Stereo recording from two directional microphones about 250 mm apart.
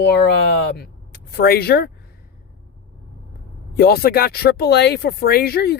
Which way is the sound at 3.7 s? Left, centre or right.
Left.